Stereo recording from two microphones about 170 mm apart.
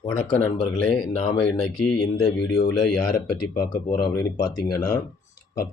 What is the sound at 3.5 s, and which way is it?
Speech, 25° left (ahead or behind).